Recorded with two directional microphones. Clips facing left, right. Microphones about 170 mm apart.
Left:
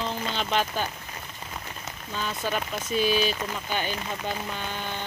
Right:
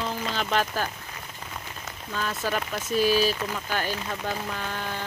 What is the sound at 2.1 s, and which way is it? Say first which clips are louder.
Speech: right 1 dB; centre (ahead or behind).